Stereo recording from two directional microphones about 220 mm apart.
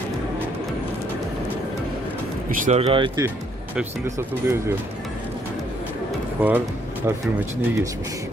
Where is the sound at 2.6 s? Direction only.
25° right (ahead or behind).